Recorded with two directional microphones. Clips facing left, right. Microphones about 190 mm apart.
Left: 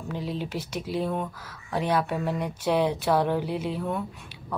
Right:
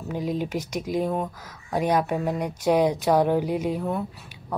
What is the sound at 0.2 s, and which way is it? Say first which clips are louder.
Speech: right 6 dB; 45° right (ahead or behind).